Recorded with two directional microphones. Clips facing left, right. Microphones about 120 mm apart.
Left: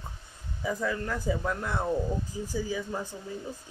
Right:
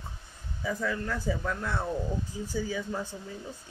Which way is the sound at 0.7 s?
15° left (ahead or behind).